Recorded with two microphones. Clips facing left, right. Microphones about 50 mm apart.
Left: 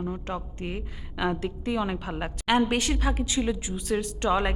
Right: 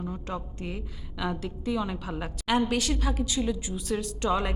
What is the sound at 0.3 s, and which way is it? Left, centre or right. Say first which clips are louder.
A woman's voice: left 2 dB; left.